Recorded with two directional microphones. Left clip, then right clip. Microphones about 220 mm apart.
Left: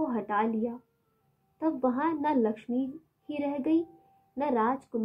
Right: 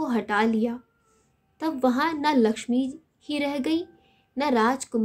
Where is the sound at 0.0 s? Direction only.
35° right (ahead or behind).